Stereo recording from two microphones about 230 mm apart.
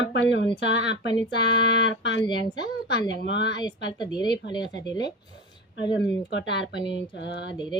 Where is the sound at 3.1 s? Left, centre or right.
Left.